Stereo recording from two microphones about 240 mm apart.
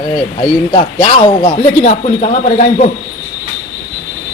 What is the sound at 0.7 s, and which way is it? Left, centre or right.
A man's voice, centre.